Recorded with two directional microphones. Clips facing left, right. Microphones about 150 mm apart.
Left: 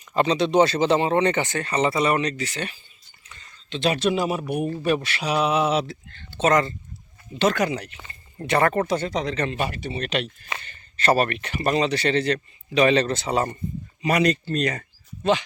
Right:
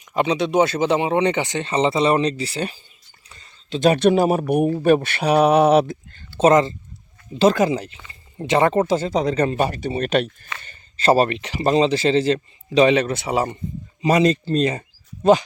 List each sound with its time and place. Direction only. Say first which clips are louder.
0.1 s speech: right 1 dB; 10° right (ahead or behind); by 6.0 s 55° right (ahead or behind)
6.3 s speech: right 5 dB; 35° right (ahead or behind)
11.0 s speech: right 4 dB; 30° right (ahead or behind)
12.9 s speech: right 2 dB; 10° right (ahead or behind)
14.0 s speech: right 4 dB; 25° right (ahead or behind)
15.2 s speech: right 7 dB; 40° right (ahead or behind)